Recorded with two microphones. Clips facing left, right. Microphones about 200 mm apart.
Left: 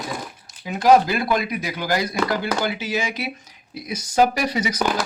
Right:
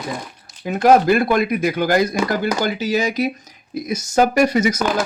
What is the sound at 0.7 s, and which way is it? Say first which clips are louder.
Speech: right 3 dB; 55° right (ahead or behind).